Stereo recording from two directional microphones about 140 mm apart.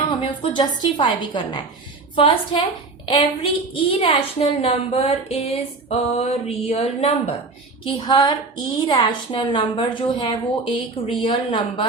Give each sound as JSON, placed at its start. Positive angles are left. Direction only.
{"t": 0.1, "sound": "a woman's voice", "side_deg": 35}
{"t": 7.9, "sound": "a woman's voice", "side_deg": 35}